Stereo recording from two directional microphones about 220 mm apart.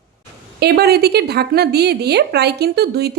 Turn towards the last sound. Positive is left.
turn(degrees=-45)  # may be behind; listen again after turning